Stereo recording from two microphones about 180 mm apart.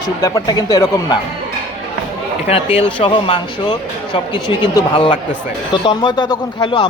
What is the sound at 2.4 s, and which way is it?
Speech, 35° left (ahead or behind).